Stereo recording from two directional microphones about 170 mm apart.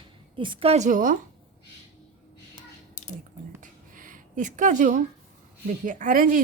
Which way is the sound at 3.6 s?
50° right (ahead or behind).